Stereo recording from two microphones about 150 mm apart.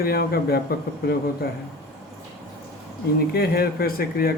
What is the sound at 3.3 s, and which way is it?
A man's voice, 90° left.